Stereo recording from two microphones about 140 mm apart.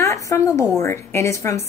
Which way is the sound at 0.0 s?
20° left (ahead or behind).